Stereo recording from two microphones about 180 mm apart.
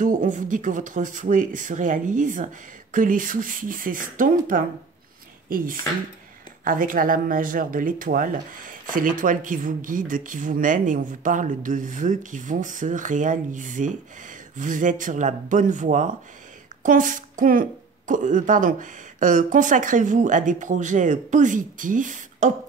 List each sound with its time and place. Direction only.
0.0 s speech: 45° right (ahead or behind)